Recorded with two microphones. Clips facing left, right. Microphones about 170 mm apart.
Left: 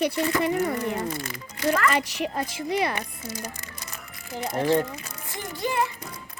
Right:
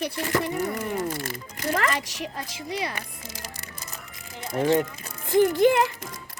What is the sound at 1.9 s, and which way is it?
Speech, 60° left (ahead or behind).